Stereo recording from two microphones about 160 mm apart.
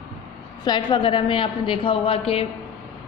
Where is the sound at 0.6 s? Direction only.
25° left (ahead or behind).